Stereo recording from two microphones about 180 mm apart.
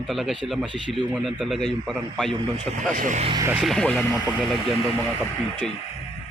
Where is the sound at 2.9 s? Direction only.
45° right (ahead or behind).